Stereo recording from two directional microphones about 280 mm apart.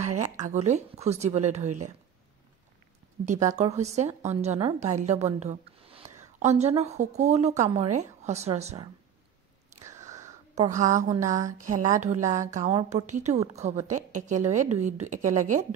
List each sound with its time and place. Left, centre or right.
0.4 s a woman's voice: right
3.3 s a woman's voice: right
9.8 s a sound: centre
10.5 s a woman's voice: right